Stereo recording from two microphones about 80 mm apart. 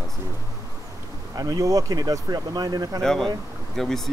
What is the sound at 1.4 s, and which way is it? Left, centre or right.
Speech, right.